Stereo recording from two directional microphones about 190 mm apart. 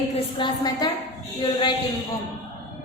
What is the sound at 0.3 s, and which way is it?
A woman's voice, 25° left (ahead or behind).